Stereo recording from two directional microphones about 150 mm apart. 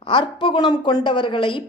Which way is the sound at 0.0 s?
35° left (ahead or behind).